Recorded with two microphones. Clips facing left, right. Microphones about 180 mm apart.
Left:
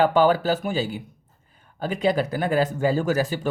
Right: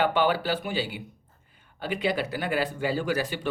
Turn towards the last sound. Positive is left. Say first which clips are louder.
# left 5 dB
turn(degrees=40)  # may be behind; listen again after turning